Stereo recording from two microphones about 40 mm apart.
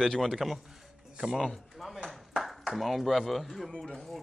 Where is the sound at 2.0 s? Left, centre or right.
Centre.